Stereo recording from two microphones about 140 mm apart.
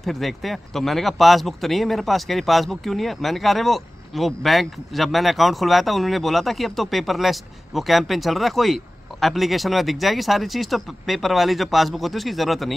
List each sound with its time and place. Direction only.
0.0 s speech: centre (ahead or behind)